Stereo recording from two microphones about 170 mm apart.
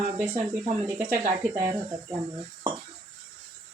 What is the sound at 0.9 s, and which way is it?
Speech, 15° right (ahead or behind).